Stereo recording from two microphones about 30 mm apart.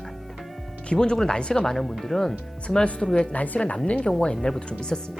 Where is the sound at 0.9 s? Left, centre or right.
Left.